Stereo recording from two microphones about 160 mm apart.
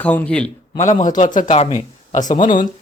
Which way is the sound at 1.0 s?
55° left (ahead or behind).